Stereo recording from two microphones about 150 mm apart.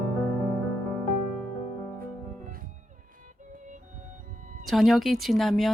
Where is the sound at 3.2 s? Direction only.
60° right (ahead or behind).